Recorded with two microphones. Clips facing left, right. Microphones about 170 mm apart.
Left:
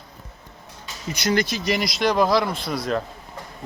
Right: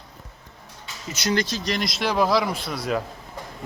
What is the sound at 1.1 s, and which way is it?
Speech, 10° left (ahead or behind).